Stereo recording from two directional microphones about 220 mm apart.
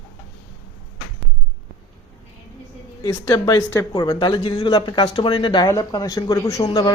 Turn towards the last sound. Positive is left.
turn(degrees=20)  # may be behind; listen again after turning